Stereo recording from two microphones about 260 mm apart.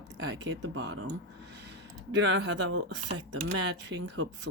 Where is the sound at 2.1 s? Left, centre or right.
Right.